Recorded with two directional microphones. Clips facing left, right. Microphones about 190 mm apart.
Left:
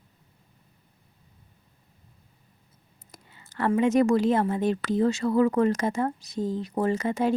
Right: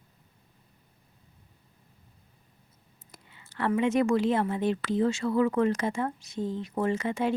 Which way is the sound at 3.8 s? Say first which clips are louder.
Left 3 dB; 40° left (ahead or behind).